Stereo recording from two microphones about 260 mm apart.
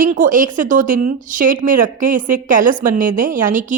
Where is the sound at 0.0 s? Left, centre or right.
Right.